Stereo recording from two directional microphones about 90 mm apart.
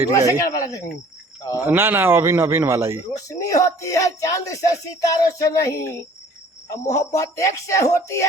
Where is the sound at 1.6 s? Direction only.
25° right (ahead or behind).